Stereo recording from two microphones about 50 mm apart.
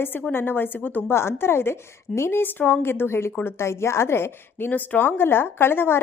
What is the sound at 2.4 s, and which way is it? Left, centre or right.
A woman's voice, left.